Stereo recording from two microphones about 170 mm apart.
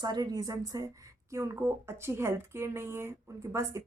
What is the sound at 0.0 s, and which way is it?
A woman's voice, 25° right (ahead or behind).